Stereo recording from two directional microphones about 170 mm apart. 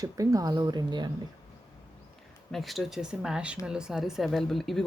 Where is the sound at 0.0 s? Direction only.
20° right (ahead or behind).